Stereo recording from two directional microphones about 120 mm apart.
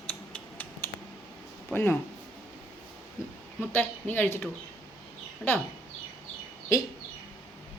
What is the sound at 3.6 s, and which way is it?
Speech, 15° left (ahead or behind).